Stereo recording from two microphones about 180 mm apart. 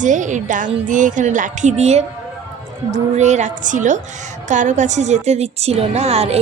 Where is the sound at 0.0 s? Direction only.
45° right (ahead or behind).